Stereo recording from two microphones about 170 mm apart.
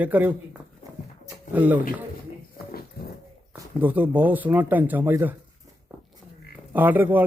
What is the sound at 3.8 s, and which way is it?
Speech, 10° right (ahead or behind).